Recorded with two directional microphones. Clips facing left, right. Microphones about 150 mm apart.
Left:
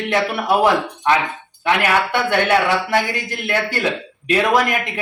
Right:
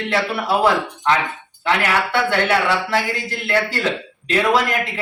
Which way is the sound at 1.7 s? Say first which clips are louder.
Left 2 dB; 15° left (ahead or behind).